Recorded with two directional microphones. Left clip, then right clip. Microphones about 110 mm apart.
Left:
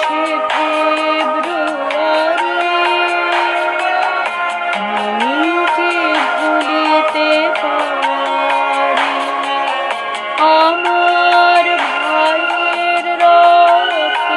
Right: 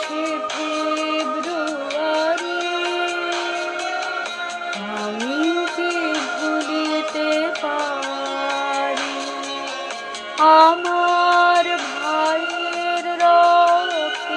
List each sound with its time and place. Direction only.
10.4 s music: 25° left (ahead or behind)
13.2 s music: 25° left (ahead or behind)